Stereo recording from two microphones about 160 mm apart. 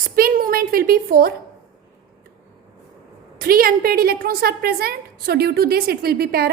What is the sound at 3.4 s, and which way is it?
A woman's voice, 65° right (ahead or behind).